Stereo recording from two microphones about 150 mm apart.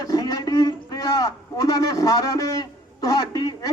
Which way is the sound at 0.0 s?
25° left (ahead or behind).